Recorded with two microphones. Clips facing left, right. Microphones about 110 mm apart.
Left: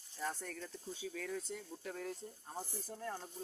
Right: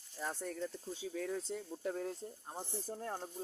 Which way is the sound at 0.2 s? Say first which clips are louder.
Right 3 dB; 20° right (ahead or behind).